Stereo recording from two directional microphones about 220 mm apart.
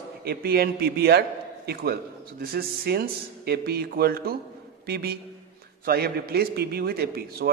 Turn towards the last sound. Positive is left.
turn(degrees=-45)  # may be behind; listen again after turning